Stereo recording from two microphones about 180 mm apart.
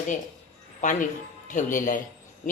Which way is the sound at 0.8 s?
45° left (ahead or behind).